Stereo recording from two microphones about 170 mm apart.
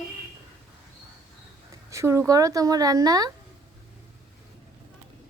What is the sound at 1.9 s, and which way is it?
A woman's voice, 15° right (ahead or behind).